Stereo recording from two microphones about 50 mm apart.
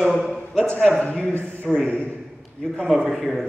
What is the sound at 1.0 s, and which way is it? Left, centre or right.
Speech, left.